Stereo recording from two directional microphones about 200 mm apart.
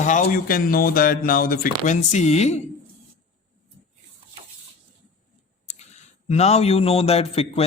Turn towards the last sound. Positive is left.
turn(degrees=30)  # may be behind; listen again after turning